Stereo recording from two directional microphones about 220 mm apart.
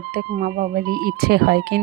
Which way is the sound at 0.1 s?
40° right (ahead or behind).